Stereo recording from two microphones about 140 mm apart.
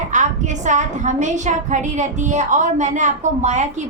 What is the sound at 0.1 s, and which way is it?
A woman's voice, 60° right (ahead or behind).